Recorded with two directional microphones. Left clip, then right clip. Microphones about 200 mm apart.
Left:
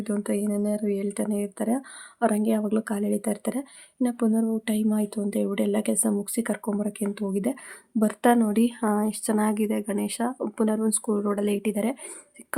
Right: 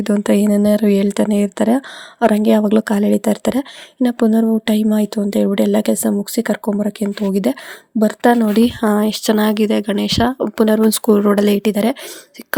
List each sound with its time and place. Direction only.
0.0 s speech: 40° right (ahead or behind)